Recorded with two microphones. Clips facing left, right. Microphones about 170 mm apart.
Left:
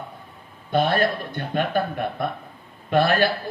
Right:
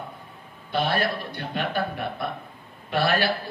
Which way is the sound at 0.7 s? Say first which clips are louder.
Left 4 dB; 50° left (ahead or behind).